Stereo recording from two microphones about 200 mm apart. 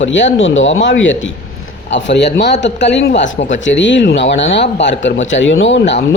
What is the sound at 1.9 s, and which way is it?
Speech, 60° left (ahead or behind).